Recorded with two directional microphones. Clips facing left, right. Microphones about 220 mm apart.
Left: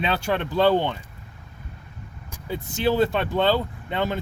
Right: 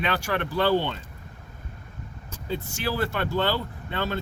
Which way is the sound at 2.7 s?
20° left (ahead or behind).